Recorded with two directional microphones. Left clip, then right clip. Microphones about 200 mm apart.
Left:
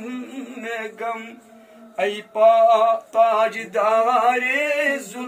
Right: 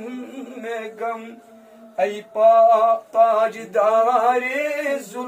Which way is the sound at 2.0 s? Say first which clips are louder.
Even; centre (ahead or behind).